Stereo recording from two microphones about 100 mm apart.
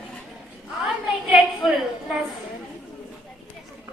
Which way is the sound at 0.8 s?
5° right (ahead or behind).